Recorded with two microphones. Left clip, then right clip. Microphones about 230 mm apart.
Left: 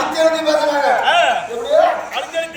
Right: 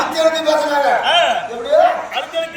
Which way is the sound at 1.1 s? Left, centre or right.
Centre.